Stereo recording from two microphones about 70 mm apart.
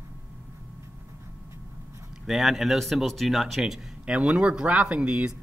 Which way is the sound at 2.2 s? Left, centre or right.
Centre.